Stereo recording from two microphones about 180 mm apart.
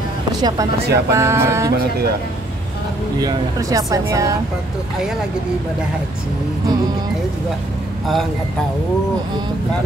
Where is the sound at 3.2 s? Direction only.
20° right (ahead or behind).